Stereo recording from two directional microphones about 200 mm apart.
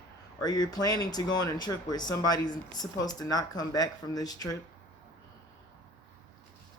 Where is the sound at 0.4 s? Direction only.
20° left (ahead or behind).